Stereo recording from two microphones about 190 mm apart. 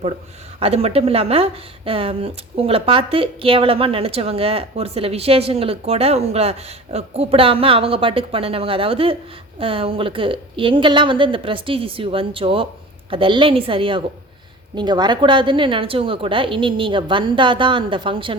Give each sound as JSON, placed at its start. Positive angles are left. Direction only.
{"t": 0.6, "sound": "speech", "side_deg": -30}